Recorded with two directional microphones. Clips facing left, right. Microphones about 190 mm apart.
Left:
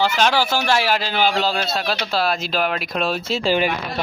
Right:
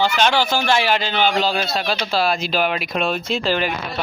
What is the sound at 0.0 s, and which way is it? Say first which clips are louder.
Speech: right 1 dB; 5° left (ahead or behind).